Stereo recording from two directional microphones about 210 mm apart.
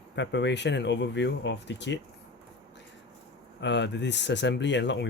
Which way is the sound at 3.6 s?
55° left (ahead or behind).